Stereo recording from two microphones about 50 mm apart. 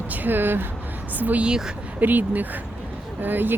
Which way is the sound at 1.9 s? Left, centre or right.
Right.